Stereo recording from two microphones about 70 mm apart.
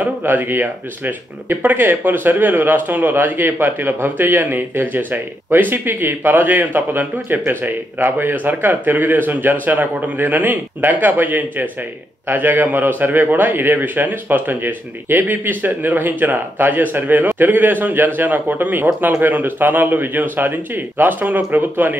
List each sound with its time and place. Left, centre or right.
0.0 s speech: right